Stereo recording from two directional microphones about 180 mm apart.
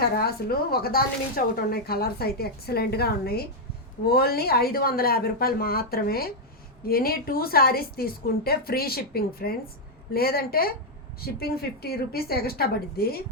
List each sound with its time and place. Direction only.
0.2 s speech: 60° left (ahead or behind)